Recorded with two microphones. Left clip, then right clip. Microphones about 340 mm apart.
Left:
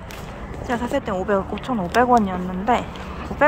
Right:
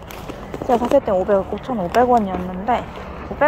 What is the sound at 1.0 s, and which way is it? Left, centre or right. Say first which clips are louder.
Speech: right 5 dB; centre.